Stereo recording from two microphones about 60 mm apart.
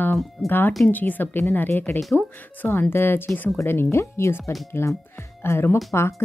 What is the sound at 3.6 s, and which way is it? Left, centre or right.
Speech, left.